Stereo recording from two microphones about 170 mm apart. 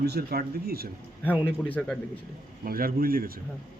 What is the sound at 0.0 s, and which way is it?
Speech, 70° right (ahead or behind).